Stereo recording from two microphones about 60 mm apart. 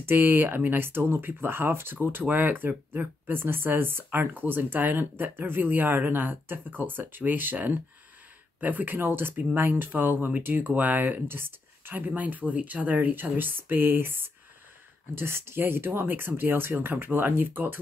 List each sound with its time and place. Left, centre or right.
0.0 s speech: right
12.1 s speech: right